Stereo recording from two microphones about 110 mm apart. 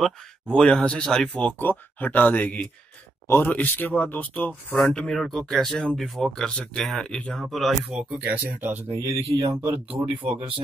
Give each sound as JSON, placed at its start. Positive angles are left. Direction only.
{"t": 0.0, "sound": "speech", "side_deg": 10}